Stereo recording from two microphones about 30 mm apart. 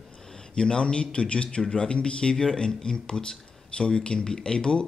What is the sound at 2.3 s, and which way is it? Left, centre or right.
Speech, left.